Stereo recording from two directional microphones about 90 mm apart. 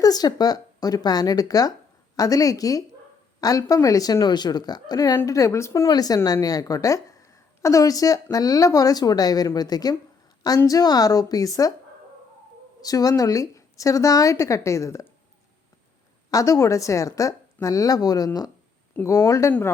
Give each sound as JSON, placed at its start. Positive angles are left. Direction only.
{"t": 0.0, "sound": "a woman's voice", "side_deg": 45}
{"t": 5.1, "sound": "a woman's voice", "side_deg": 35}
{"t": 12.8, "sound": "a woman's voice", "side_deg": 40}
{"t": 16.3, "sound": "a woman's voice", "side_deg": 35}